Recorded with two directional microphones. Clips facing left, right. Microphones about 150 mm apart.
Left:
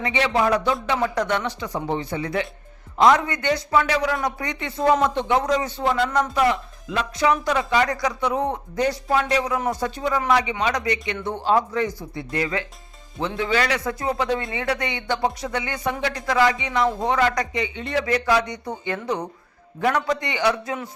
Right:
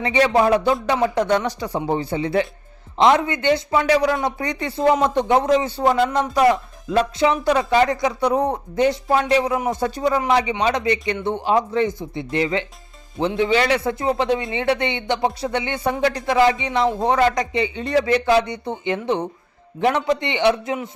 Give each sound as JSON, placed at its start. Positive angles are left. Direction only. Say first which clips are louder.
{"t": 0.0, "sound": "speech", "louder": "right 4 dB", "side_deg": -35}
{"t": 7.2, "sound": "speech", "louder": "left 1 dB", "side_deg": -30}